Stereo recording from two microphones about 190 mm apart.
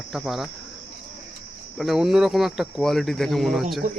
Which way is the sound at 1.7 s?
Centre (ahead or behind).